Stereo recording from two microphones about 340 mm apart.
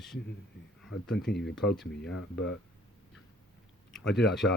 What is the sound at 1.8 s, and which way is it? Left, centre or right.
Speech, left.